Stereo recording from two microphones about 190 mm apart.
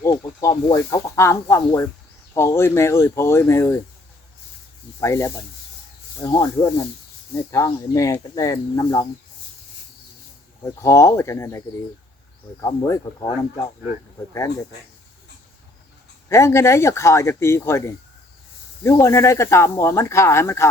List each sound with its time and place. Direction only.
0.0 s speech: 15° left (ahead or behind)
4.9 s speech: 15° left (ahead or behind)
10.6 s speech: 15° left (ahead or behind)
16.3 s speech: 15° left (ahead or behind)